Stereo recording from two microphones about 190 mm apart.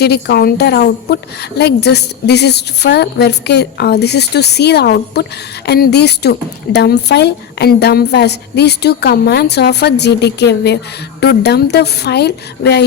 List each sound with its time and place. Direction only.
0.0 s a woman's voice: 60° left (ahead or behind)